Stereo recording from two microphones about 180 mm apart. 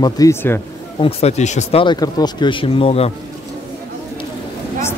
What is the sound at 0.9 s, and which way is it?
Speech, 35° left (ahead or behind).